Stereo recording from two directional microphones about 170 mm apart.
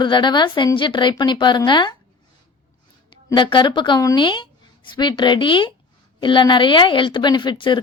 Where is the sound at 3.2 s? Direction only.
30° left (ahead or behind).